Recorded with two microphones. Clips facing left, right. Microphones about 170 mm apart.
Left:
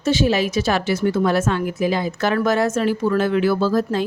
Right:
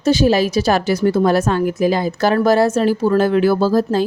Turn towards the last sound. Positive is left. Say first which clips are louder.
# right 4 dB
turn(degrees=-35)  # may be behind; listen again after turning